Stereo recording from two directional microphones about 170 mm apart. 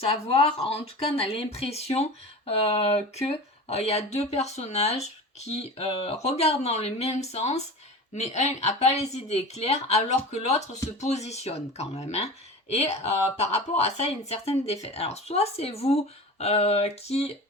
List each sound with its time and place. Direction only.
0.6 s speech: 35° left (ahead or behind)